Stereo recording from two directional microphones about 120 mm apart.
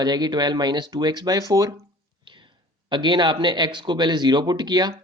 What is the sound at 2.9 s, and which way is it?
Speech, 40° right (ahead or behind).